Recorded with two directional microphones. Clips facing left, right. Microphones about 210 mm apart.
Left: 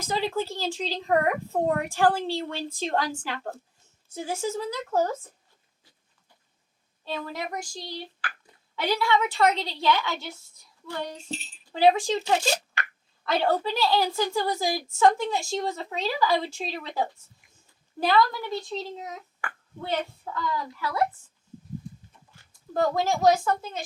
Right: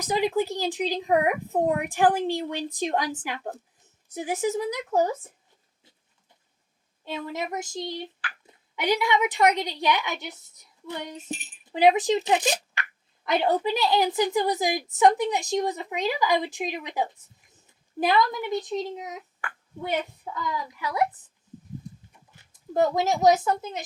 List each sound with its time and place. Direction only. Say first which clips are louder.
0.0 s speech: right 4 dB; 15° right (ahead or behind)
7.0 s speech: right 1 dB; 20° right (ahead or behind)
22.7 s speech: right 2 dB; 20° right (ahead or behind)